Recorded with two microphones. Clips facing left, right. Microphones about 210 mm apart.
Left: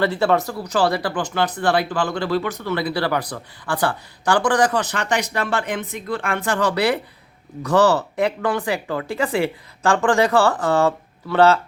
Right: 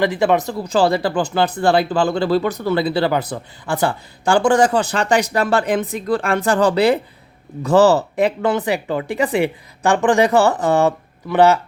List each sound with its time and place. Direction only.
0.0 s speech: 15° right (ahead or behind)